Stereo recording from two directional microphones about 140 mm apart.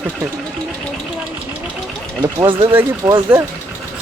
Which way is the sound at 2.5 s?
35° right (ahead or behind).